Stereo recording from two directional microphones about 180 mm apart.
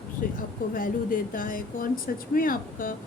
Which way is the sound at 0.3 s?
50° left (ahead or behind).